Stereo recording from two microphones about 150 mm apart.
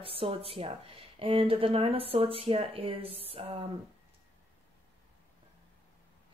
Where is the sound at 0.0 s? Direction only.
40° right (ahead or behind).